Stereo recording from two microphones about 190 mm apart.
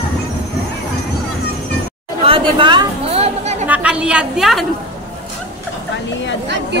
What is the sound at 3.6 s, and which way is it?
A woman's voice, 5° right (ahead or behind).